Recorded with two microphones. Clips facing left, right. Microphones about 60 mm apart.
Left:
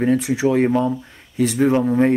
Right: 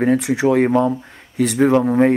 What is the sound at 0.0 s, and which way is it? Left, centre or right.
Speech, right.